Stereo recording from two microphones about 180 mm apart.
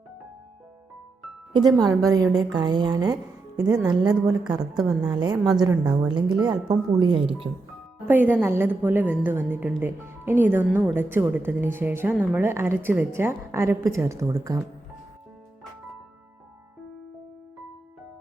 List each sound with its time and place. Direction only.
1.5 s a woman's voice: 20° right (ahead or behind)
4.8 s a woman's voice: 5° right (ahead or behind)
5.1 s a woman's voice: 25° right (ahead or behind)
8.0 s a woman's voice: 10° right (ahead or behind)